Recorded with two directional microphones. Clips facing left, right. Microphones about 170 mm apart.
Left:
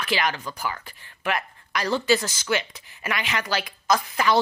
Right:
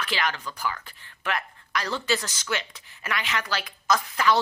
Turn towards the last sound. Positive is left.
turn(degrees=15)  # may be behind; listen again after turning